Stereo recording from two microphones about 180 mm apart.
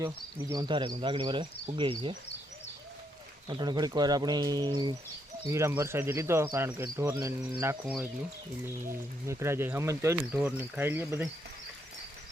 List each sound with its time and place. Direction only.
0.0 s speech: 15° right (ahead or behind)
0.7 s speech: 25° right (ahead or behind)
3.5 s speech: 25° right (ahead or behind)